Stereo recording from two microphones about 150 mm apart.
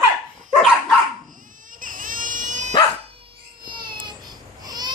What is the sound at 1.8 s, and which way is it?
Dog, 65° right (ahead or behind).